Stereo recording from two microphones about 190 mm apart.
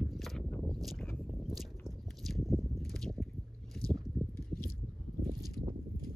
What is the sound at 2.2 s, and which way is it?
Biting, centre (ahead or behind).